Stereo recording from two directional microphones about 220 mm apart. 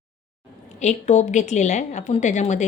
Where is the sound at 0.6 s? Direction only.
30° left (ahead or behind).